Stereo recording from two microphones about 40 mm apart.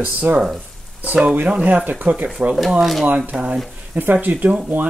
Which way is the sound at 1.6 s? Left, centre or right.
Right.